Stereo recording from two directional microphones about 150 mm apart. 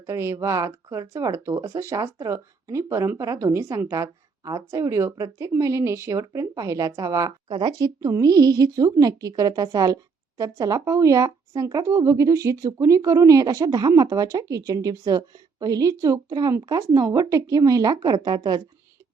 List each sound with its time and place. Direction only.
0.0 s speech: 20° right (ahead or behind)